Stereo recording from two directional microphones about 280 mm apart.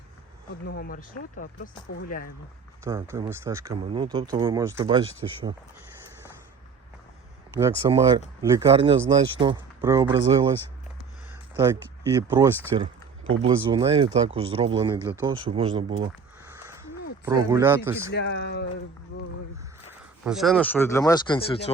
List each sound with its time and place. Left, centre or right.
0.6 s speech: left
2.8 s speech: centre
7.8 s speech: centre
11.5 s speech: centre
17.2 s speech: centre
18.1 s speech: left
19.9 s speech: centre